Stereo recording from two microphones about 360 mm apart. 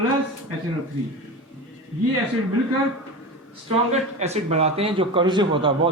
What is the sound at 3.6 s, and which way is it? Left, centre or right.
Speech, centre.